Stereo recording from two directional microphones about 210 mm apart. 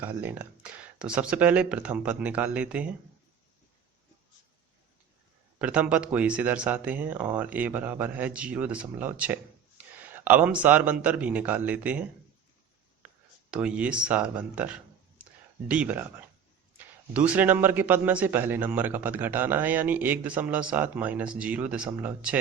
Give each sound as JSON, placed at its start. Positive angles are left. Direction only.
{"t": 0.0, "sound": "speech", "side_deg": -10}
{"t": 5.5, "sound": "speech", "side_deg": -5}
{"t": 13.5, "sound": "speech", "side_deg": -5}
{"t": 15.2, "sound": "a sound", "side_deg": -5}
{"t": 16.7, "sound": "speech", "side_deg": -5}